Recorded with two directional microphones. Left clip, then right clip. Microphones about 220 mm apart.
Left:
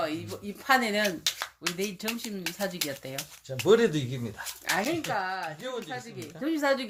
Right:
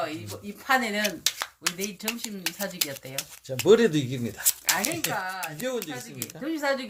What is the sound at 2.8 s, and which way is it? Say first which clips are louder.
Speech: left 1 dB; 45° left (ahead or behind).